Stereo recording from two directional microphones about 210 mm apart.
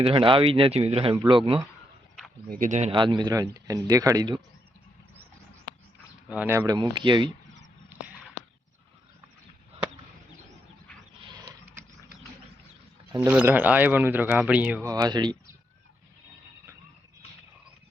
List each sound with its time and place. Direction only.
0.0 s speech: 25° right (ahead or behind)
2.5 s speech: 40° right (ahead or behind)
2.9 s speech: 20° right (ahead or behind)
6.2 s speech: 5° right (ahead or behind); by 7.3 s 20° right (ahead or behind)
7.9 s a sound: 5° right (ahead or behind)
11.2 s a sound: 20° right (ahead or behind)
13.1 s speech: 10° right (ahead or behind)